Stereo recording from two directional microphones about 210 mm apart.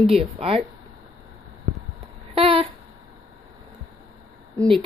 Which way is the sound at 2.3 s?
25° right (ahead or behind).